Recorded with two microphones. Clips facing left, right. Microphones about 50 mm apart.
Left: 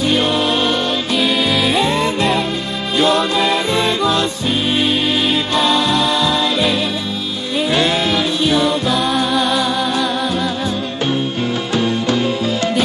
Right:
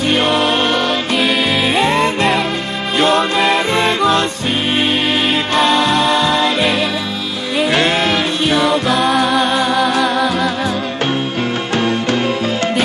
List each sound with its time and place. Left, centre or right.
0.1 s music: right
1.5 s music: right
1.9 s music: right
5.3 s music: right
9.4 s music: right
9.8 s music: right
11.7 s music: right